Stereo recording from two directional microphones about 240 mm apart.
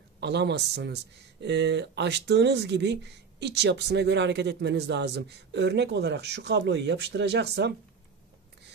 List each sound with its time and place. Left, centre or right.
0.2 s speech: right